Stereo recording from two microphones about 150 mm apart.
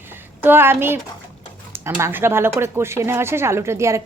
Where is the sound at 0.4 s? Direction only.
15° right (ahead or behind).